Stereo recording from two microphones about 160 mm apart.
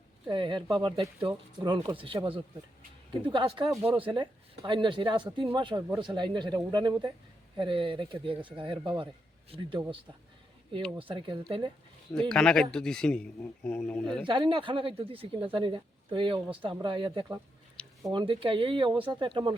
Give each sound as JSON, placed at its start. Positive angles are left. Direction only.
{"t": 0.3, "sound": "speech", "side_deg": -30}
{"t": 1.0, "sound": "speech", "side_deg": -20}
{"t": 1.7, "sound": "speech", "side_deg": -35}
{"t": 10.9, "sound": "speech", "side_deg": -35}
{"t": 12.3, "sound": "speech", "side_deg": 5}
{"t": 14.3, "sound": "speech", "side_deg": -30}
{"t": 17.8, "sound": "a sound", "side_deg": 5}
{"t": 18.1, "sound": "speech", "side_deg": -30}